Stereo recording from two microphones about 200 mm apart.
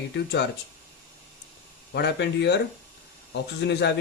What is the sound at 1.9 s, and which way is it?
Speech, 60° left (ahead or behind).